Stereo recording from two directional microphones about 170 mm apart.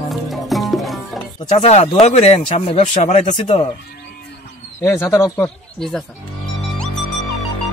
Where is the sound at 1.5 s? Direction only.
40° left (ahead or behind).